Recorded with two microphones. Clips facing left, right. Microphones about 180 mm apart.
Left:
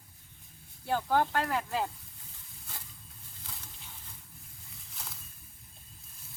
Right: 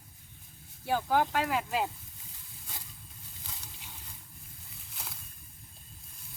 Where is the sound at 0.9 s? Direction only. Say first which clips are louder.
Even; 5° right (ahead or behind).